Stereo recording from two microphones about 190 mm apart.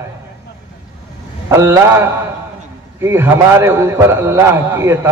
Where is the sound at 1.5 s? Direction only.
15° right (ahead or behind).